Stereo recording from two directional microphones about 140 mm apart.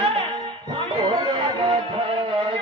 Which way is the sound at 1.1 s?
40° right (ahead or behind).